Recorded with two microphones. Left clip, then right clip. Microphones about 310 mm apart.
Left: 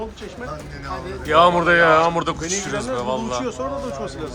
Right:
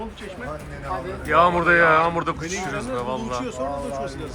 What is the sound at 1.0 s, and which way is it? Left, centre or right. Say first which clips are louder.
Speech: left 3 dB; centre.